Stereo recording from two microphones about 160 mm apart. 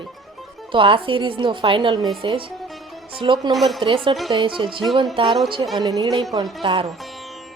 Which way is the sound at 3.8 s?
30° right (ahead or behind).